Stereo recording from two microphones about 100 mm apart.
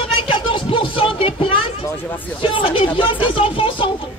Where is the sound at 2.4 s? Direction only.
60° left (ahead or behind).